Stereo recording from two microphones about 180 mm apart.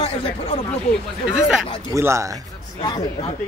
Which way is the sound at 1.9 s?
15° right (ahead or behind).